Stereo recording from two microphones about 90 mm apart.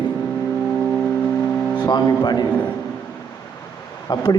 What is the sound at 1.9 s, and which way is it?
Speech, 50° left (ahead or behind).